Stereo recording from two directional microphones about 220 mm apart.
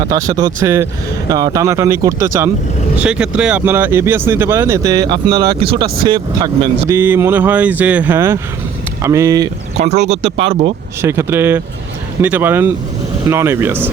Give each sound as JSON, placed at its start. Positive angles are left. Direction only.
{"t": 0.0, "sound": "speech", "side_deg": -15}
{"t": 6.8, "sound": "speech", "side_deg": -10}
{"t": 9.7, "sound": "speech", "side_deg": -30}
{"t": 11.0, "sound": "speech", "side_deg": -10}